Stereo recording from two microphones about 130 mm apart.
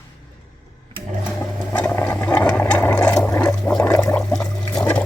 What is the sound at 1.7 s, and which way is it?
Sewing machine, 15° left (ahead or behind).